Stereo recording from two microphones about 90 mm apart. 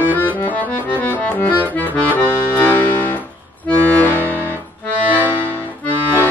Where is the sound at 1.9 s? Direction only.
20° left (ahead or behind).